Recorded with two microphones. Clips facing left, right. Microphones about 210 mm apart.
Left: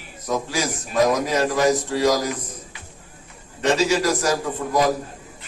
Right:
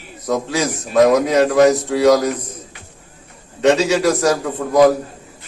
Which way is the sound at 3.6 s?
70° right (ahead or behind).